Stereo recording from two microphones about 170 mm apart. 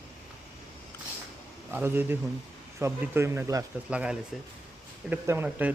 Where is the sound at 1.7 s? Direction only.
15° right (ahead or behind).